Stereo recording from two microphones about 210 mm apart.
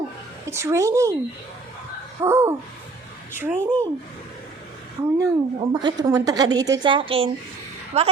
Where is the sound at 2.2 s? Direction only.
10° right (ahead or behind).